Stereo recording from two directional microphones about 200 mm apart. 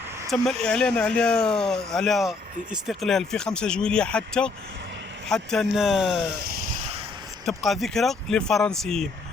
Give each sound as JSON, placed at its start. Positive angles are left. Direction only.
{"t": 0.3, "sound": "speech", "side_deg": 0}
{"t": 6.4, "sound": "a sound", "side_deg": -45}
{"t": 7.4, "sound": "speech", "side_deg": 0}